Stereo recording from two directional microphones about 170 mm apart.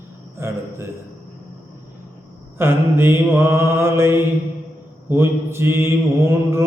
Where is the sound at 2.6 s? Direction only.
10° right (ahead or behind).